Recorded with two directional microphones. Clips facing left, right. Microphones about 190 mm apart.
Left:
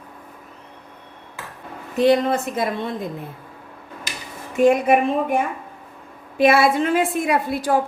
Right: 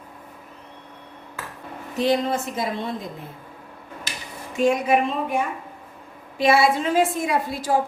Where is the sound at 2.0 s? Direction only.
55° left (ahead or behind).